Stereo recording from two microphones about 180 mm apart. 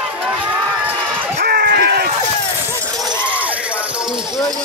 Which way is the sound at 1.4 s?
60° right (ahead or behind).